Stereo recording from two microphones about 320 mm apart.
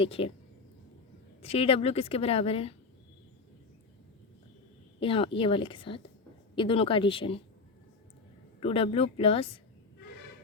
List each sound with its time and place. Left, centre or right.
0.0 s a woman's voice: centre
1.4 s a woman's voice: centre
4.9 s a woman's voice: centre
8.6 s a woman's voice: centre